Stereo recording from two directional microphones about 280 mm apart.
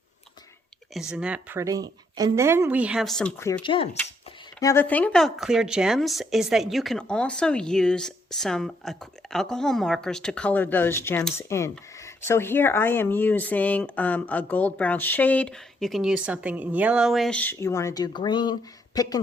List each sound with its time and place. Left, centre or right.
1.1 s speech: centre